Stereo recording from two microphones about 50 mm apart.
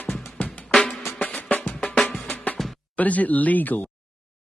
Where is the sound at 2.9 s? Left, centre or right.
Left.